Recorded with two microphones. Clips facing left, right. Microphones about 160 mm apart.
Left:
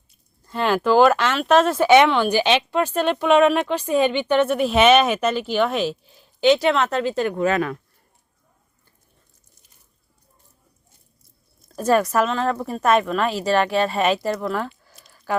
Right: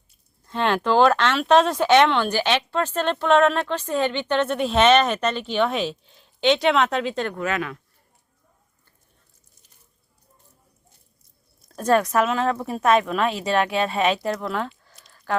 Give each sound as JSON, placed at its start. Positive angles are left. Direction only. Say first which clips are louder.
{"t": 0.4, "sound": "speech", "louder": "left 2 dB", "side_deg": 5}
{"t": 7.3, "sound": "speech", "louder": "left 6 dB", "side_deg": 35}
{"t": 11.8, "sound": "a woman's voice", "louder": "left 1 dB", "side_deg": 5}